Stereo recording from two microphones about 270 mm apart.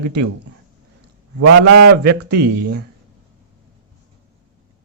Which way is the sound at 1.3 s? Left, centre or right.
Right.